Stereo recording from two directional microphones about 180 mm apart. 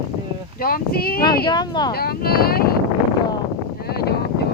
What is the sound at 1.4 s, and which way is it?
Speech, 25° left (ahead or behind).